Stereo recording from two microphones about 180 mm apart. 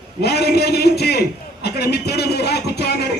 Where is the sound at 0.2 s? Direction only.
65° left (ahead or behind).